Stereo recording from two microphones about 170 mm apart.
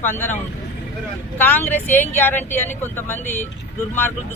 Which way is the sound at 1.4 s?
10° left (ahead or behind).